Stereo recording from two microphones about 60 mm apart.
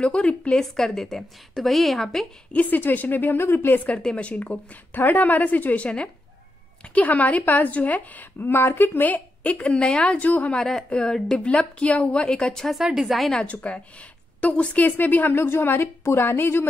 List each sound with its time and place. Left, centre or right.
0.0 s a woman's voice: centre
0.6 s a woman's voice: centre
2.5 s a woman's voice: left
4.0 s a woman's voice: centre
10.6 s a woman's voice: centre
11.4 s a woman's voice: left
12.7 s a woman's voice: centre
13.5 s a woman's voice: left